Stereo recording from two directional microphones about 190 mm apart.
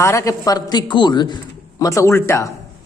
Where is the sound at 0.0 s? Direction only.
15° left (ahead or behind).